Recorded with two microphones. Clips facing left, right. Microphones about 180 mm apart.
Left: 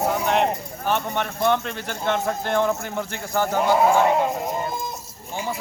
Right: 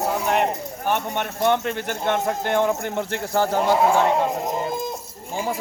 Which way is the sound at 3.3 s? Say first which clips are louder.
Right 1 dB; 30° right (ahead or behind).